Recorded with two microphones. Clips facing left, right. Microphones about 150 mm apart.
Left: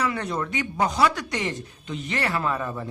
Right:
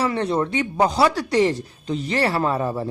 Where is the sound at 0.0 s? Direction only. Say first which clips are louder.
Right 5 dB; 30° right (ahead or behind).